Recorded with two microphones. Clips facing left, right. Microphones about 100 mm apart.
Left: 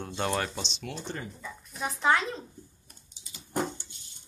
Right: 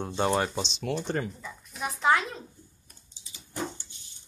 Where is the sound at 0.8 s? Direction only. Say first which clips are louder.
Right 10 dB; 45° right (ahead or behind).